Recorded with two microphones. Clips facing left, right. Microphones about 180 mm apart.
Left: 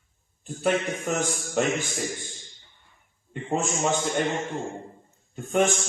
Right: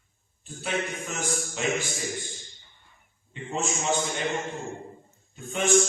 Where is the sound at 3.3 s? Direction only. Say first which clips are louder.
Left 4 dB; 50° left (ahead or behind).